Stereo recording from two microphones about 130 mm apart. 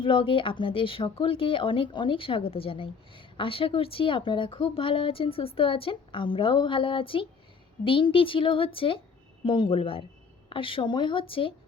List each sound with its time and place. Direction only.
0.0 s speech: 45° left (ahead or behind)